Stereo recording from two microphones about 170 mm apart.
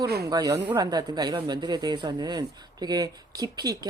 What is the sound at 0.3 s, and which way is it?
Speech, 20° right (ahead or behind).